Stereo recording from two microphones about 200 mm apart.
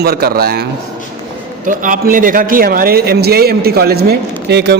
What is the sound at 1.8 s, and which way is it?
A man's voice, 40° right (ahead or behind).